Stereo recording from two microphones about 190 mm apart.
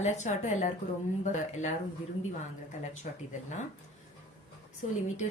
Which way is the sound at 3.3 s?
40° left (ahead or behind).